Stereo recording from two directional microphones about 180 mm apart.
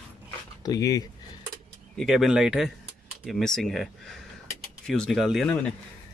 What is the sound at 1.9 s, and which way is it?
Speech, centre (ahead or behind).